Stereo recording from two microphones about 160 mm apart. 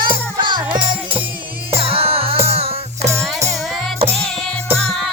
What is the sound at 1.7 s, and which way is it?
Music, 35° right (ahead or behind).